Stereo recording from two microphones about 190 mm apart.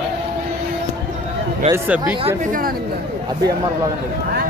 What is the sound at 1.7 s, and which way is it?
Speech, 10° right (ahead or behind).